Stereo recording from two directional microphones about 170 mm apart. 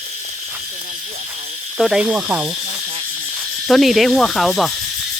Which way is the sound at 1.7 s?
5° right (ahead or behind).